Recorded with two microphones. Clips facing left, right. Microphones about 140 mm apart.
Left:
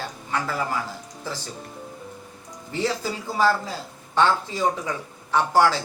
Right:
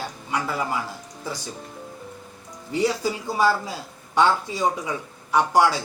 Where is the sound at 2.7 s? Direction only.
15° right (ahead or behind).